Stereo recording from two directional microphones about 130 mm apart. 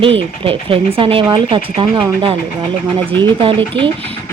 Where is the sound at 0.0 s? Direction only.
45° right (ahead or behind).